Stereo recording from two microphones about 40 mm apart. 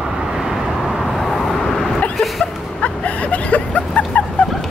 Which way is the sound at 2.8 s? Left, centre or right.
Left.